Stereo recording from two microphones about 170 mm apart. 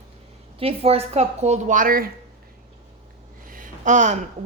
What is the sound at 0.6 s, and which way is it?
A woman's voice, 35° right (ahead or behind).